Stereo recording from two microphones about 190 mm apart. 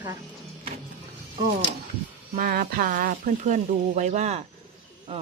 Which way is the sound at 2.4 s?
50° right (ahead or behind).